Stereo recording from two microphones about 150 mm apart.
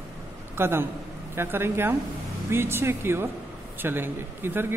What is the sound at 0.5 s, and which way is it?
A man's voice, 15° right (ahead or behind).